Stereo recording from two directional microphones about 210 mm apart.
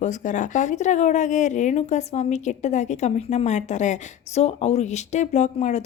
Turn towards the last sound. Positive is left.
turn(degrees=35)  # may be behind; listen again after turning